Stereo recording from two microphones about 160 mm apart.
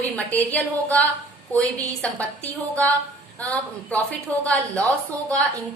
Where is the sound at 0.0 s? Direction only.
10° left (ahead or behind).